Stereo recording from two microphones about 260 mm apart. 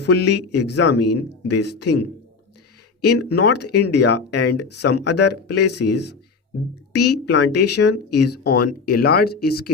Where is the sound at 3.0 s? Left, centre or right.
Left.